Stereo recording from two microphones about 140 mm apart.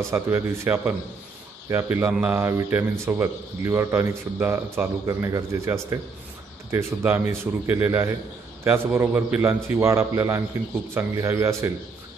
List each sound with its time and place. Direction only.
0.1 s a man's voice: 15° right (ahead or behind)